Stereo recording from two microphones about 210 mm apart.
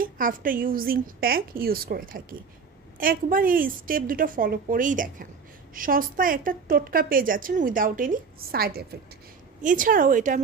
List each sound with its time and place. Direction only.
0.0 s a woman's voice: 40° right (ahead or behind)